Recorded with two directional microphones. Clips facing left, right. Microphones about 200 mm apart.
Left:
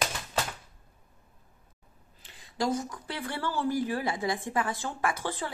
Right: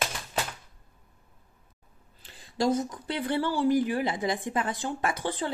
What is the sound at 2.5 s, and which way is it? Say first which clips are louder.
Speech: right 4 dB; 25° right (ahead or behind).